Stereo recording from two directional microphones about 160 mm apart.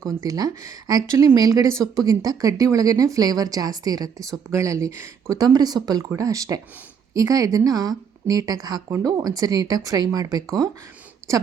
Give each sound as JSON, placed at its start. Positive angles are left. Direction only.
{"t": 0.2, "sound": "a woman's voice", "side_deg": -20}